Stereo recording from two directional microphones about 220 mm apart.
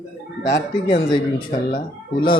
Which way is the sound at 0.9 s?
25° left (ahead or behind).